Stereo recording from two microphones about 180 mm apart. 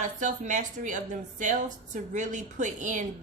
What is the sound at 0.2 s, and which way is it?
A woman's voice, 45° right (ahead or behind).